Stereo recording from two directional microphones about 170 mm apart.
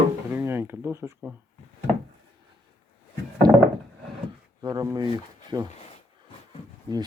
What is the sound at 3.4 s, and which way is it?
Wood, 25° right (ahead or behind).